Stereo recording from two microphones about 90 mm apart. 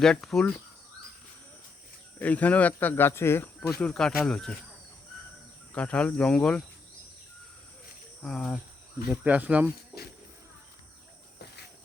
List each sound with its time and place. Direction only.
0.0 s speech: 5° left (ahead or behind)
2.1 s speech: 15° left (ahead or behind)
3.9 s speech: 5° left (ahead or behind)
5.7 s speech: 15° left (ahead or behind)
8.2 s speech: centre (ahead or behind)
9.2 s speech: 15° right (ahead or behind)